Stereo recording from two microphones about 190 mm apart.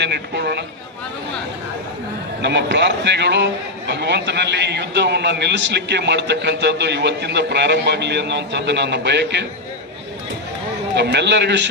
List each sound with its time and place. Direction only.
0.0 s a man's voice: 60° right (ahead or behind)
2.4 s a man's voice: 65° right (ahead or behind)
10.9 s a man's voice: 60° right (ahead or behind)